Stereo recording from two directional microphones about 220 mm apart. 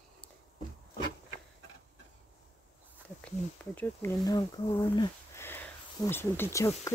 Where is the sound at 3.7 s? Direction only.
5° left (ahead or behind).